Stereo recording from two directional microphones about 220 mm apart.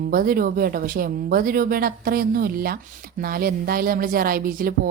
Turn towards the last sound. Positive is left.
turn(degrees=-40)  # may be behind; listen again after turning